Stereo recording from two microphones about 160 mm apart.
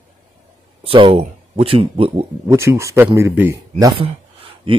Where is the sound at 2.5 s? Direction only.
15° right (ahead or behind).